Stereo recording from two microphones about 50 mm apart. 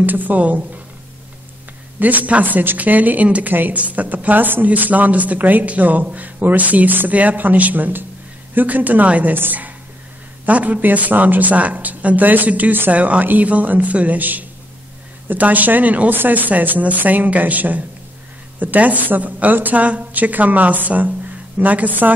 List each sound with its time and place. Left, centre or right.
0.0 s a woman's voice: right
2.0 s a woman's voice: right